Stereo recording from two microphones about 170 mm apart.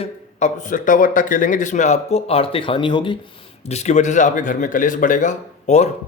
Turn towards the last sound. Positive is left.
turn(degrees=40)  # may be behind; listen again after turning